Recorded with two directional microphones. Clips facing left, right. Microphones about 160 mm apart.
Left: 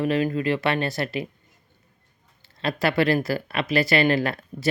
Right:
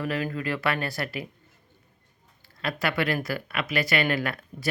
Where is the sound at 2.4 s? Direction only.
25° left (ahead or behind).